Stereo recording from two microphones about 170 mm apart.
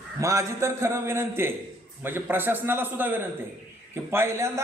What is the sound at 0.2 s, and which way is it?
A man's voice, 20° right (ahead or behind).